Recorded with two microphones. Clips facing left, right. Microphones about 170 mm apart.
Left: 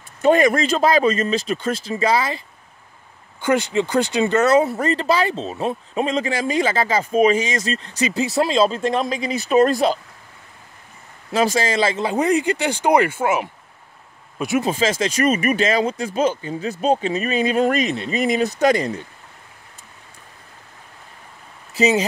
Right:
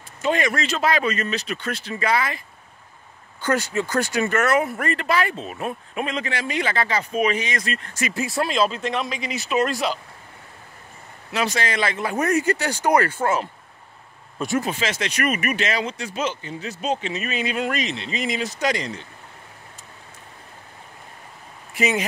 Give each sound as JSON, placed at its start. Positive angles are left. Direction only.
{"t": 0.2, "sound": "speech", "side_deg": 45}
{"t": 3.3, "sound": "speech", "side_deg": 20}
{"t": 7.7, "sound": "speech", "side_deg": 20}
{"t": 11.7, "sound": "speech", "side_deg": 30}
{"t": 14.6, "sound": "speech", "side_deg": 30}
{"t": 15.9, "sound": "speech", "side_deg": 50}
{"t": 16.8, "sound": "speech", "side_deg": 35}